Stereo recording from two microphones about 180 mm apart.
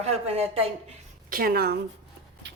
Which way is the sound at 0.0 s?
35° right (ahead or behind).